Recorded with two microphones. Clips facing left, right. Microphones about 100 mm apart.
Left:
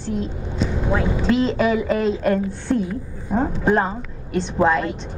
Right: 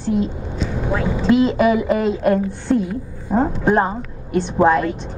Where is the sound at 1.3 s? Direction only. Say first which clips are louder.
Right 4 dB; 5° right (ahead or behind).